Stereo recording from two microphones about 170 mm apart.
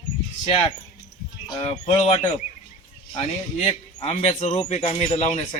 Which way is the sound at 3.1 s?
40° left (ahead or behind).